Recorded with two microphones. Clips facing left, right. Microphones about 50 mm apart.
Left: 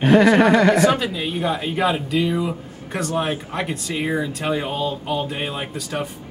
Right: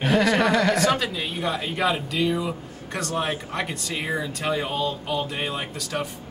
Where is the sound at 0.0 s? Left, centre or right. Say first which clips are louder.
Left 6 dB; centre.